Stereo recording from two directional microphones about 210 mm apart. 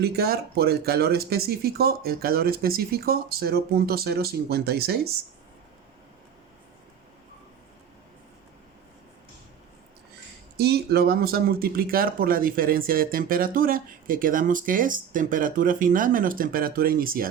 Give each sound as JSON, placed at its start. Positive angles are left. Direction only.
{"t": 0.0, "sound": "speech", "side_deg": -50}
{"t": 10.6, "sound": "speech", "side_deg": -50}